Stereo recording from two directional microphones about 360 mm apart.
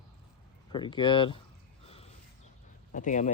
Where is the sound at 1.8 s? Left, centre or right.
Centre.